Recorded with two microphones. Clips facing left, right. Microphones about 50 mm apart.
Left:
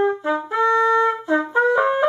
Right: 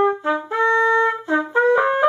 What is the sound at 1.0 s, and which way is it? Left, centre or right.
Trumpet, centre.